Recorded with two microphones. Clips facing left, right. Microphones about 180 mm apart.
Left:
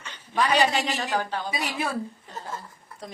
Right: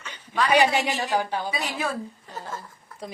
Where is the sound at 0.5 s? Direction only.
15° right (ahead or behind).